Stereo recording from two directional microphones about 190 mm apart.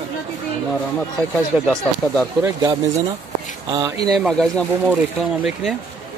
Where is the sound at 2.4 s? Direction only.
15° right (ahead or behind).